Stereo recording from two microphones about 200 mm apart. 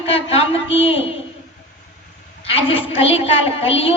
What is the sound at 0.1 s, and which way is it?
Speech, 30° left (ahead or behind).